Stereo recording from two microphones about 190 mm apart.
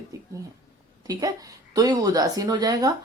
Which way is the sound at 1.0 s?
20° right (ahead or behind).